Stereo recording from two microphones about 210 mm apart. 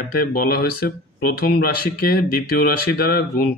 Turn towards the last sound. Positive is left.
turn(degrees=45)  # may be behind; listen again after turning